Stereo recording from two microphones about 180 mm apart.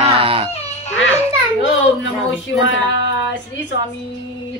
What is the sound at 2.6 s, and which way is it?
Speech, 90° left.